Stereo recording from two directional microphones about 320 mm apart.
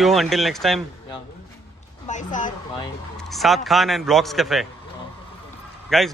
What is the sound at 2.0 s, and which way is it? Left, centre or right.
Speech, left.